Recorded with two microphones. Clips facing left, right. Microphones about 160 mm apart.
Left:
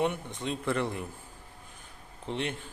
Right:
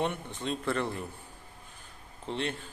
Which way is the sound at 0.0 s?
15° left (ahead or behind).